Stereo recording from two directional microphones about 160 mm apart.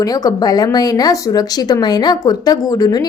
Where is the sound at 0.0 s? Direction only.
25° left (ahead or behind).